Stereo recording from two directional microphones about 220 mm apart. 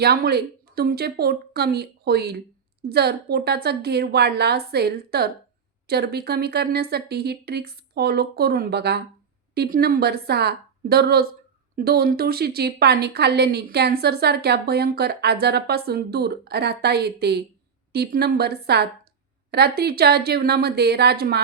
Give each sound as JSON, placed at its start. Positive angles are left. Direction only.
{"t": 0.0, "sound": "a woman's voice", "side_deg": -45}